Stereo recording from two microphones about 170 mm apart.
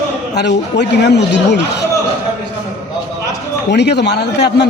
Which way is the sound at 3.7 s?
80° left.